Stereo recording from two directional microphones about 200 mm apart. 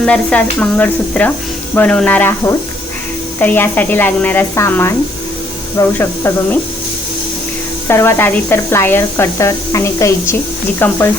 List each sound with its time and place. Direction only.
0.0 s speech: 5° left (ahead or behind)
6.0 s speech: 10° left (ahead or behind)
7.9 s speech: 10° left (ahead or behind)